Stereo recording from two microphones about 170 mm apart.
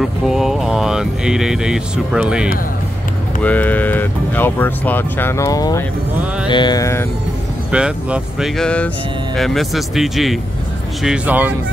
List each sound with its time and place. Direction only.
0.0 s speech: centre (ahead or behind)
3.4 s speech: 10° left (ahead or behind)
6.4 s mantra: 25° left (ahead or behind)
7.7 s speech: 5° right (ahead or behind)